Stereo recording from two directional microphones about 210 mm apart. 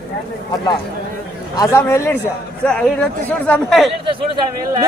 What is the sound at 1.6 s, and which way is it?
A man's voice, 15° left (ahead or behind).